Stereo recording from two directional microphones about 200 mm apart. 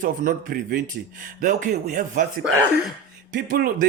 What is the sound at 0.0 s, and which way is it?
A man's voice, 45° right (ahead or behind).